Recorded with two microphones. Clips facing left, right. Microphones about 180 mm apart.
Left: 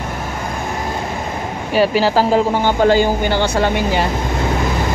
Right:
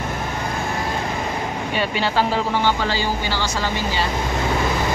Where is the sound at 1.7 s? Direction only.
40° left (ahead or behind); by 4.1 s 55° left (ahead or behind).